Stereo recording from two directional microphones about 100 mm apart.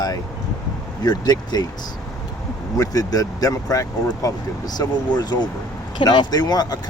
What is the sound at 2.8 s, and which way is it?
Speech, 35° left (ahead or behind).